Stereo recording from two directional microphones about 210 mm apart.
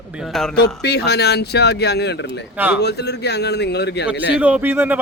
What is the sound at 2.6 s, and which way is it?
Speech, 10° right (ahead or behind).